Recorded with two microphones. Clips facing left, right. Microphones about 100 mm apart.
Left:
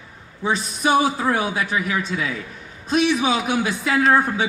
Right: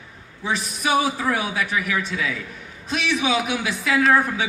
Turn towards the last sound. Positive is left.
turn(degrees=35)  # may be behind; listen again after turning